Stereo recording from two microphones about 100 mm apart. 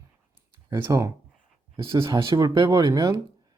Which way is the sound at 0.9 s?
30° right (ahead or behind).